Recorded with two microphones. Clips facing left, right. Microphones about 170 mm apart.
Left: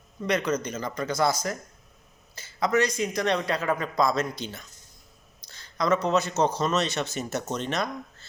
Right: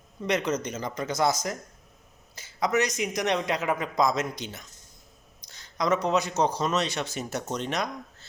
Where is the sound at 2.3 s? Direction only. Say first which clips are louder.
Left 1 dB; 15° right (ahead or behind).